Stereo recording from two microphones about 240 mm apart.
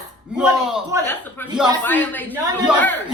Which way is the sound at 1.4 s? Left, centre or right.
Centre.